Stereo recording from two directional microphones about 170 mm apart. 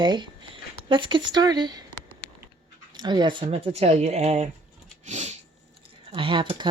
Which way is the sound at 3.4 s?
40° right (ahead or behind).